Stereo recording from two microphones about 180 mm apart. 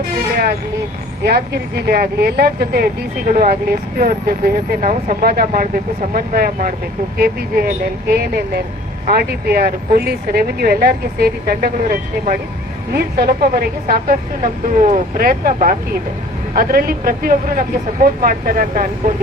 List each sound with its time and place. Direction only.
1.2 s speech: 60° right (ahead or behind)